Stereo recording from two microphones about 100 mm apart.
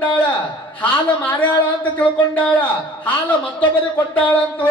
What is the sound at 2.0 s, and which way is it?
A man's voice, 15° left (ahead or behind).